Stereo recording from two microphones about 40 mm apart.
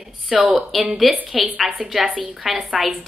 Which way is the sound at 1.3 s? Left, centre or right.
Right.